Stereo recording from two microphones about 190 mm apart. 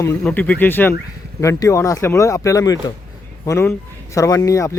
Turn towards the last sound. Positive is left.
turn(degrees=15)  # may be behind; listen again after turning